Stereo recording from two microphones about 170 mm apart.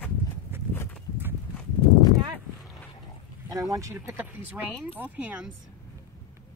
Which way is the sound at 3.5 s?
20° right (ahead or behind).